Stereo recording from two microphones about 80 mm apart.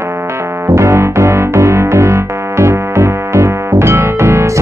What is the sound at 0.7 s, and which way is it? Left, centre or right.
Music, right.